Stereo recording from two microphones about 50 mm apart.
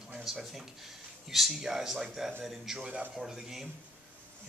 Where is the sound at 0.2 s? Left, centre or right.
Centre.